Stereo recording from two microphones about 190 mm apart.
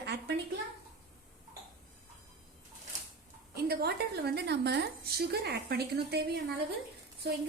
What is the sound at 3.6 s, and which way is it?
A woman's voice, 55° right (ahead or behind).